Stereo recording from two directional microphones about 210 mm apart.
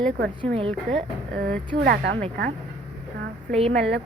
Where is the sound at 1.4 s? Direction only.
50° right (ahead or behind).